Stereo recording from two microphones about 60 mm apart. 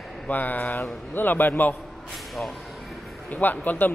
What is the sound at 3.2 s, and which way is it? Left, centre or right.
Speech, left.